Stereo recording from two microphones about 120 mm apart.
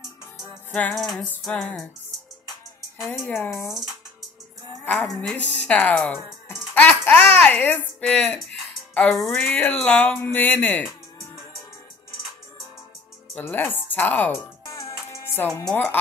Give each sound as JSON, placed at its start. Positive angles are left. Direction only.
{"t": 0.7, "sound": "music", "side_deg": 15}
{"t": 0.9, "sound": "music", "side_deg": 0}
{"t": 3.3, "sound": "speech", "side_deg": 20}
{"t": 4.9, "sound": "music", "side_deg": 0}
{"t": 5.3, "sound": "speech", "side_deg": 10}
{"t": 6.7, "sound": "a sound", "side_deg": 15}
{"t": 9.5, "sound": "speech", "side_deg": 15}
{"t": 13.3, "sound": "speech", "side_deg": 15}
{"t": 14.7, "sound": "music", "side_deg": 25}
{"t": 15.6, "sound": "speech", "side_deg": 10}